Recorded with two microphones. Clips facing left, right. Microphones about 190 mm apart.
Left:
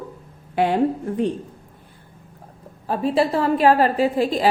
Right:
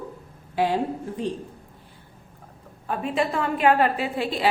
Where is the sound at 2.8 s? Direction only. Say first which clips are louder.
Left 5 dB; 35° left (ahead or behind).